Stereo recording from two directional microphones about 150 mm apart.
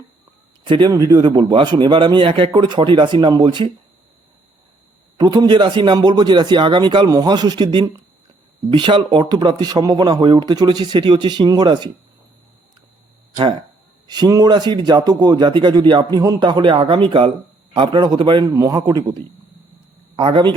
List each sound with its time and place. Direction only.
0.6 s speech: 30° right (ahead or behind)
5.1 s a man's voice: 25° right (ahead or behind)
14.1 s a man's voice: 25° right (ahead or behind)